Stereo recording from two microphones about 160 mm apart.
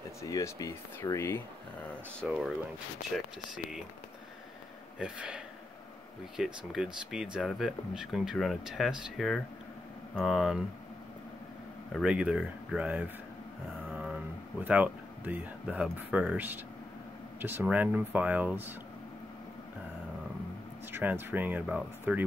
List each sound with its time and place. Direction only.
0.2 s speech: 20° left (ahead or behind)
2.2 s speech: 5° right (ahead or behind)
4.9 s speech: 5° right (ahead or behind)
11.9 s speech: 5° right (ahead or behind)
20.9 s speech: 10° right (ahead or behind)